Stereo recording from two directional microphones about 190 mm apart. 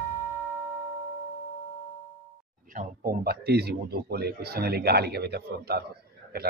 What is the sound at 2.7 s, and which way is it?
A man's voice, 45° right (ahead or behind).